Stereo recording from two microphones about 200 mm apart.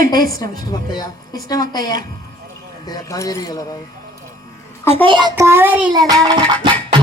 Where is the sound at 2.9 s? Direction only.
15° left (ahead or behind).